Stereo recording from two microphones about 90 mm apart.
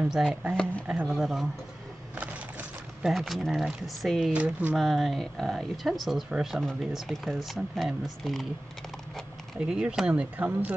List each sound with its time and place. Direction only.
0.0 s speech: 5° right (ahead or behind)
3.0 s speech: 5° right (ahead or behind)
4.3 s speech: 15° right (ahead or behind)
4.7 s speech: centre (ahead or behind)
9.6 s speech: 10° right (ahead or behind)